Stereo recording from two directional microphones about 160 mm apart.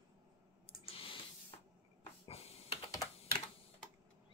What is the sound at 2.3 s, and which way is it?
Typing, 40° left (ahead or behind).